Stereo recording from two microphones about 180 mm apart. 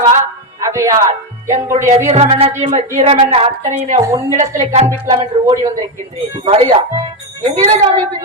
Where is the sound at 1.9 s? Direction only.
40° right (ahead or behind).